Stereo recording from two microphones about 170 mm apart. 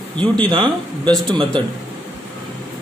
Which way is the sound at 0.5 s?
30° right (ahead or behind).